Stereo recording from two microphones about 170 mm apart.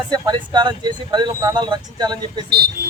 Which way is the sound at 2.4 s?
70° right (ahead or behind).